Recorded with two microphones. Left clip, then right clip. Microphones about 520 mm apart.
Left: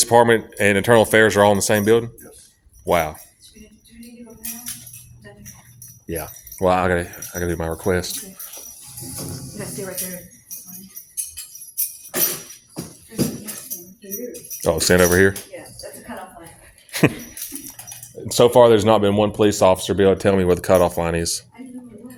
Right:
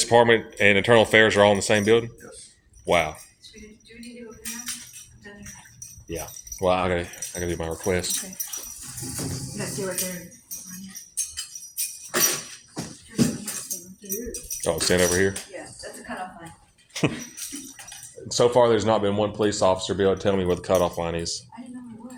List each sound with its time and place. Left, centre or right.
0.0 s speech: left
6.1 s speech: left
14.6 s speech: left
16.9 s dog: left
18.3 s speech: left